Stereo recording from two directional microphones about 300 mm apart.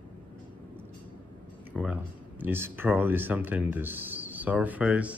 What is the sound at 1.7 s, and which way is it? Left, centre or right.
Speech, centre.